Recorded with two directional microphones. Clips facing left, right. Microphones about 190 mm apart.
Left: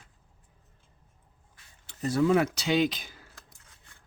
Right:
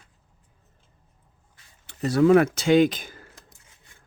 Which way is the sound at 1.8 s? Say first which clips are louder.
Right 6 dB; 70° right (ahead or behind).